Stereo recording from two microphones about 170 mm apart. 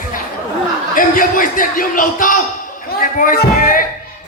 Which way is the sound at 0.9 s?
55° left (ahead or behind).